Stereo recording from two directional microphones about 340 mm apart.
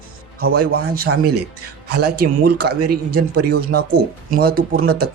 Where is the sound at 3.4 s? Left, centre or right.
Right.